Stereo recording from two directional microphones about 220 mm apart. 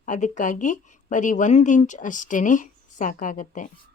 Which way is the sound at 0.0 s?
35° left (ahead or behind).